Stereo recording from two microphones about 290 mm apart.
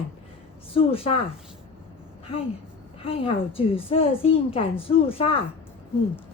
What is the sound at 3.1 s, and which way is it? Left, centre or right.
A woman's voice, centre.